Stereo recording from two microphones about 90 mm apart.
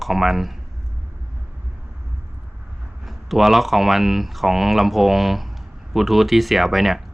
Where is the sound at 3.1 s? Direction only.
Centre (ahead or behind).